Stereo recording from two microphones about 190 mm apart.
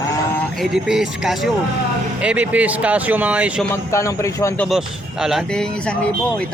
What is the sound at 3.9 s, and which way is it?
Speech, 15° left (ahead or behind).